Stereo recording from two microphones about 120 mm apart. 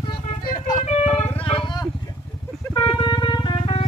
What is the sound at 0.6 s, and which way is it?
Music, 80° left.